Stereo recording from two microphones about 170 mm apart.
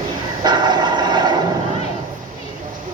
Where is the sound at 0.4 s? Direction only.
25° right (ahead or behind).